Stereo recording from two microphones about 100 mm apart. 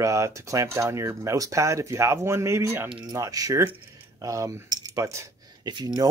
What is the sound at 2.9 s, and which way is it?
Speech, 40° right (ahead or behind).